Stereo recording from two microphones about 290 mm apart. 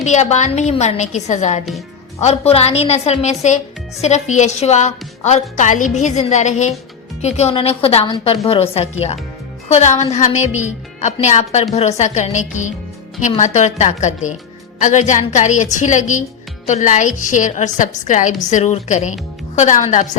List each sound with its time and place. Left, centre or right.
0.0 s a woman's voice: left